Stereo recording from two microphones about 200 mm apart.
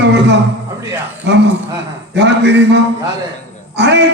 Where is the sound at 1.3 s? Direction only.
60° right (ahead or behind).